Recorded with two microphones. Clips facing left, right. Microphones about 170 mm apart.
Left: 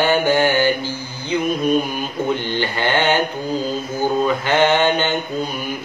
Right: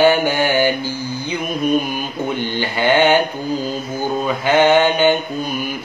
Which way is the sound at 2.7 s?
10° right (ahead or behind).